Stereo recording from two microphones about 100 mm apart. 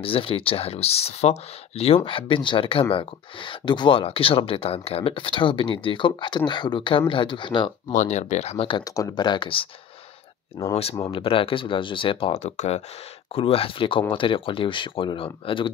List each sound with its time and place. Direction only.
0.0 s speech: 65° left (ahead or behind); by 1.3 s 90° left
2.0 s speech: 60° left (ahead or behind)
8.5 s speech: 65° left (ahead or behind)
8.8 s speech: 35° left (ahead or behind)
9.2 s speech: 50° left (ahead or behind)
10.6 s speech: 40° left (ahead or behind)
11.1 s speech: 60° left (ahead or behind); by 12.8 s 90° left
13.3 s speech: 70° left (ahead or behind)